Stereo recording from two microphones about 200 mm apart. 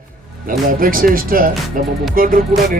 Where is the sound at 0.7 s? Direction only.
45° right (ahead or behind).